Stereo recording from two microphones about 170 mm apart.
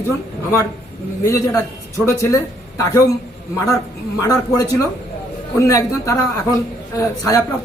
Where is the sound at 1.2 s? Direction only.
15° left (ahead or behind).